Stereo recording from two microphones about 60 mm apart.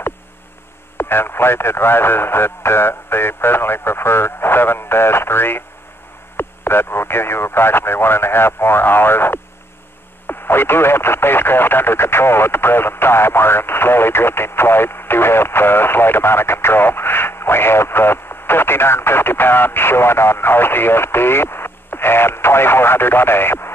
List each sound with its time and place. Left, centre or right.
0.9 s speech: left